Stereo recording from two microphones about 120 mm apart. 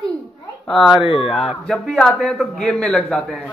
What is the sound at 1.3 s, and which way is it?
A man's voice, centre (ahead or behind).